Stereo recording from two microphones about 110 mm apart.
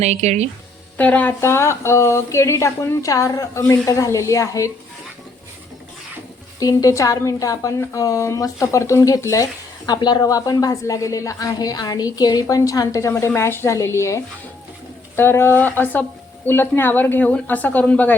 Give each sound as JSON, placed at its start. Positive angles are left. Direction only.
{"t": 0.0, "sound": "speech", "side_deg": -90}
{"t": 0.9, "sound": "a woman's voice", "side_deg": 15}
{"t": 6.6, "sound": "a woman's voice", "side_deg": 30}